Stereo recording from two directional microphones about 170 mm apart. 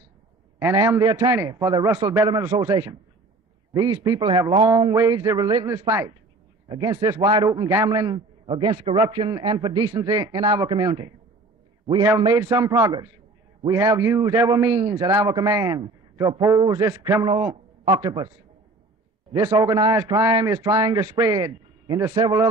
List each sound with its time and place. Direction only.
0.6 s a man's voice: 15° right (ahead or behind)
12.2 s a man's voice: 20° right (ahead or behind)
19.3 s a man's voice: 20° right (ahead or behind)